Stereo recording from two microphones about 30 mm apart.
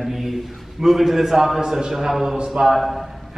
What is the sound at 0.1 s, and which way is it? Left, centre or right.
A man's voice, centre.